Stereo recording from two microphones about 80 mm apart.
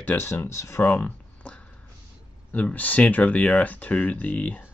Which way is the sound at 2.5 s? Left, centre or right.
Left.